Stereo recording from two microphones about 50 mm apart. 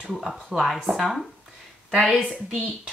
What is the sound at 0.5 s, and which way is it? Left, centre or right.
Speech, centre.